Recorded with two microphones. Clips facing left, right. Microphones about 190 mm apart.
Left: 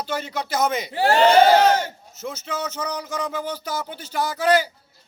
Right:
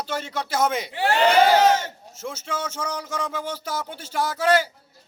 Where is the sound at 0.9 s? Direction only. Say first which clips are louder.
Left 4 dB; 40° left (ahead or behind).